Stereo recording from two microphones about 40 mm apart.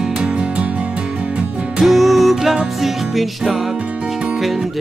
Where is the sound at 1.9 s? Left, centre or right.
Centre.